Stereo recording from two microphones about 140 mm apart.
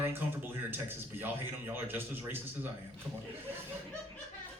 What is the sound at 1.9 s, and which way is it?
Speech, 15° right (ahead or behind).